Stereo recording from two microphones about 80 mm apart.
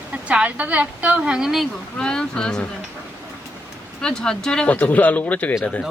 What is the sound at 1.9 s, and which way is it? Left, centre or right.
Speech, centre.